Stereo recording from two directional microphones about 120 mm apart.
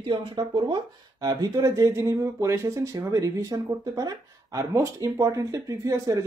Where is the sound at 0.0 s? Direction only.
45° right (ahead or behind).